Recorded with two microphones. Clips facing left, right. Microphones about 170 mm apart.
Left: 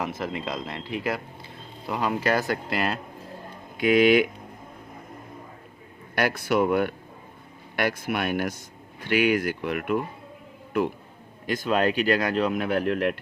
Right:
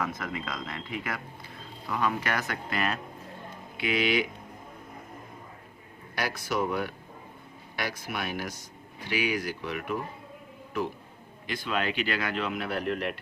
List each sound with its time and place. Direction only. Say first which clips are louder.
0.0 s a man's voice: left 4 dB; 25° left (ahead or behind)
3.8 s speech: left 9 dB; 50° left (ahead or behind)
6.1 s speech: left 7 dB; 60° left (ahead or behind)
11.4 s a man's voice: left 7 dB; 45° left (ahead or behind)